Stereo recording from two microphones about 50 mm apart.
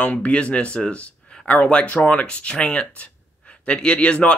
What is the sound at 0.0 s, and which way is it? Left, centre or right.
Speech, left.